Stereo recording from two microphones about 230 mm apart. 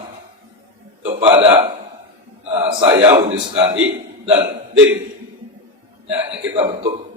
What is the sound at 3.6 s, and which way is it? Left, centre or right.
Speech, right.